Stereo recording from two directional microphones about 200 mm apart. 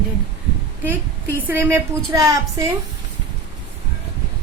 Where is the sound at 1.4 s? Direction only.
10° right (ahead or behind).